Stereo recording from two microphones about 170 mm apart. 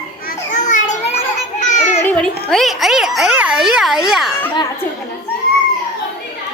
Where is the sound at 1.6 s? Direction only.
45° left (ahead or behind).